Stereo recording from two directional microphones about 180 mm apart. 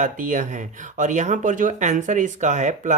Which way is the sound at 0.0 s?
45° right (ahead or behind).